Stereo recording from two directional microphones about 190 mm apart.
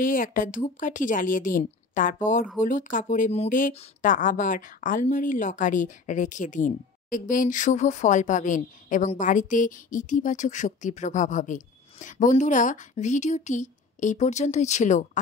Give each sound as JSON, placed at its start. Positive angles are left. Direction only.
{"t": 0.0, "sound": "a woman's voice", "side_deg": 45}